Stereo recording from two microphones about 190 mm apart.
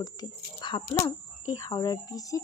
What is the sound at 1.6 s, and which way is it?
Speech, 20° left (ahead or behind).